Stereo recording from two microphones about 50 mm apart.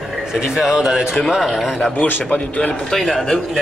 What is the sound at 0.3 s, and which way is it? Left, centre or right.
Speech, centre.